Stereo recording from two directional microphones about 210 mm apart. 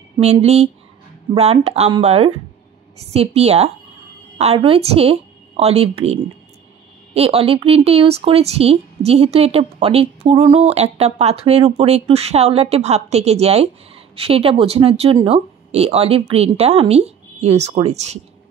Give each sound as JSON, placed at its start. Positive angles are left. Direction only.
{"t": 0.2, "sound": "a woman's voice", "side_deg": -30}
{"t": 7.2, "sound": "a woman's voice", "side_deg": -30}